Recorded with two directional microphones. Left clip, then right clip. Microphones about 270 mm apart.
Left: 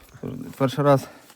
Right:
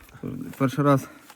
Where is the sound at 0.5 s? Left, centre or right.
Left.